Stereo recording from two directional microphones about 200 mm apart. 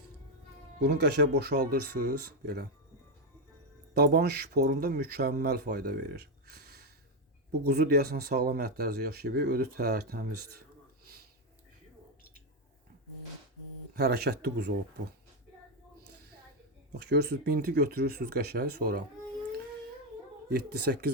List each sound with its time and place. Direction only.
0.8 s speech: 55° right (ahead or behind)
3.9 s speech: 50° right (ahead or behind)
13.9 s speech: 55° right (ahead or behind)
16.9 s speech: 55° right (ahead or behind)
20.5 s speech: 55° right (ahead or behind)